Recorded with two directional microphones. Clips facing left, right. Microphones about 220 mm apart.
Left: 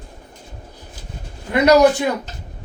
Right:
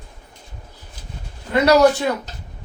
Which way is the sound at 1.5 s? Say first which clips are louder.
Left 1 dB; 15° left (ahead or behind).